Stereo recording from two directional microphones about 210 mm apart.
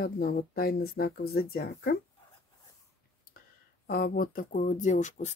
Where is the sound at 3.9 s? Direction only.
45° left (ahead or behind).